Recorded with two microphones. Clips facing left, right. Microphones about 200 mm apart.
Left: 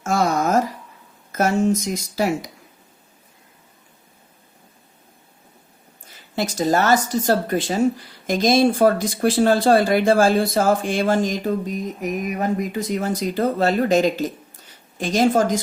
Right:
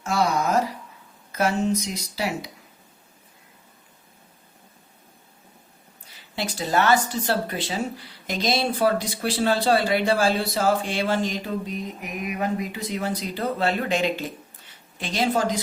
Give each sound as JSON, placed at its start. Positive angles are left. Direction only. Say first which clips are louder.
{"t": 0.0, "sound": "a sound", "louder": "left 3 dB", "side_deg": 50}
{"t": 1.3, "sound": "speech", "louder": "left 4 dB", "side_deg": 45}
{"t": 6.1, "sound": "speech", "louder": "left 6 dB", "side_deg": 45}